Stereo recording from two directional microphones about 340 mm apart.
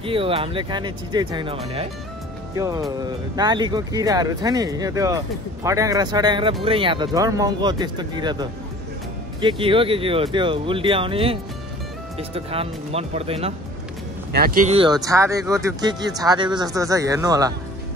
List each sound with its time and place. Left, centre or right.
0.0 s speech: centre